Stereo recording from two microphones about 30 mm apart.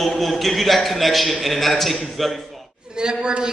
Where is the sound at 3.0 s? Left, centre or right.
Right.